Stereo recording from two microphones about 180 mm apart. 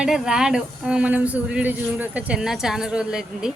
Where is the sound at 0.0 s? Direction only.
5° right (ahead or behind).